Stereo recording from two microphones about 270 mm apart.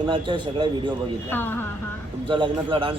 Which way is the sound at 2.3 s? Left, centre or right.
Centre.